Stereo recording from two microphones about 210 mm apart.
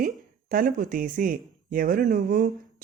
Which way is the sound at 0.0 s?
40° right (ahead or behind).